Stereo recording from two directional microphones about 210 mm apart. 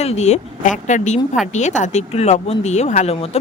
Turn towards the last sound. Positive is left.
turn(degrees=30)  # may be behind; listen again after turning